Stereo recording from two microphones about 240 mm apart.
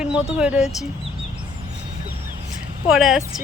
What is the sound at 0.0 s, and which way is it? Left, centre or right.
Speech, centre.